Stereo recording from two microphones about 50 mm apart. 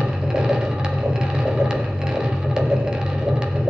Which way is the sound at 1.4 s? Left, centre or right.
Centre.